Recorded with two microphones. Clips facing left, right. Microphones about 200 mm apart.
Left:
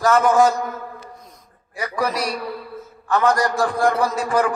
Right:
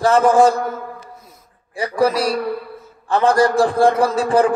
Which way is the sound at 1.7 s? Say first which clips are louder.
Right 6 dB; 30° right (ahead or behind).